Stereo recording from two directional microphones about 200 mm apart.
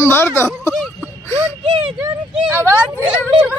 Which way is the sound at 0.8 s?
5° left (ahead or behind).